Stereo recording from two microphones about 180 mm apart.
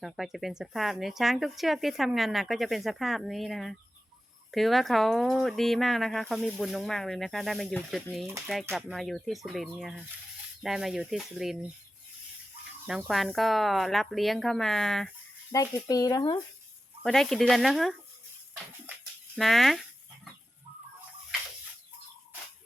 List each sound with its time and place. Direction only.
0.0 s speech: centre (ahead or behind)
12.9 s speech: centre (ahead or behind)
15.5 s speech: 20° left (ahead or behind)
17.0 s speech: 5° left (ahead or behind)
19.4 s speech: centre (ahead or behind)